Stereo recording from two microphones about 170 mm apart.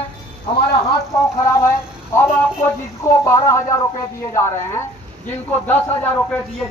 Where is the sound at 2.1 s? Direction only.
15° left (ahead or behind).